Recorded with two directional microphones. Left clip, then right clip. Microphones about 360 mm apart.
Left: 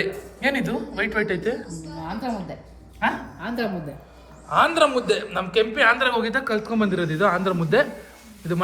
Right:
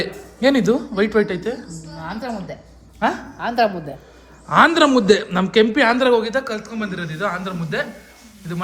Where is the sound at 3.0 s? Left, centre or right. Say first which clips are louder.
Right 4 dB; centre.